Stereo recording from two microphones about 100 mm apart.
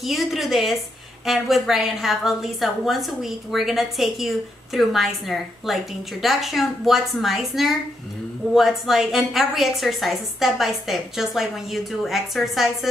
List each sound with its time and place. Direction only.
0.0 s a woman's voice: centre (ahead or behind)